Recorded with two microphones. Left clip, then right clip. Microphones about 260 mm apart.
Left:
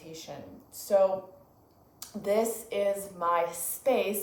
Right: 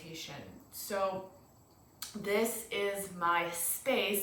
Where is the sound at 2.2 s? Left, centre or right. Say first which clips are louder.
Left 5 dB; right.